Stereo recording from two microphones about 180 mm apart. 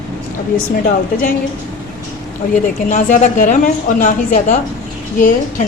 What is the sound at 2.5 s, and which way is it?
Speech, 45° left (ahead or behind).